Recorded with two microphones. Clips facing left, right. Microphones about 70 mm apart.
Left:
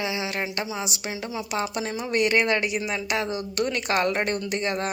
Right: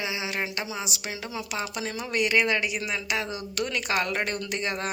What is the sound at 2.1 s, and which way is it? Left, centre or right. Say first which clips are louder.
Speech: left 2 dB; left.